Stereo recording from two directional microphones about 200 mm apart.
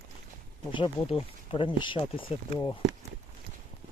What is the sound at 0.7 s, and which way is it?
Speech, 25° left (ahead or behind).